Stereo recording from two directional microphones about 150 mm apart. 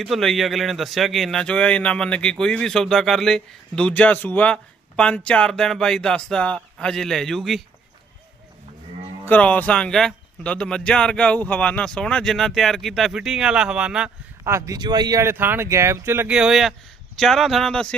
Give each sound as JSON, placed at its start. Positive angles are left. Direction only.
{"t": 0.0, "sound": "speech", "side_deg": 0}
{"t": 9.2, "sound": "speech", "side_deg": 10}
{"t": 14.4, "sound": "speech", "side_deg": -20}